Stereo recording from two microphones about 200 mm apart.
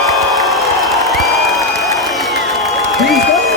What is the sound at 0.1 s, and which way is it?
Applause, centre (ahead or behind).